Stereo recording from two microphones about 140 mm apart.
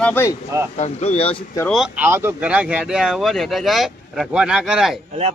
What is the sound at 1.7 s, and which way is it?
Speech, centre (ahead or behind).